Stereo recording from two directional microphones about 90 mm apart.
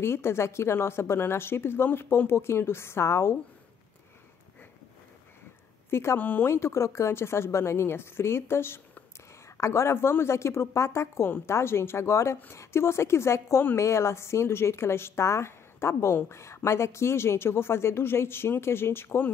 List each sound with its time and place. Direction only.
0.0 s a woman's voice: 30° left (ahead or behind)
5.9 s a woman's voice: 25° left (ahead or behind)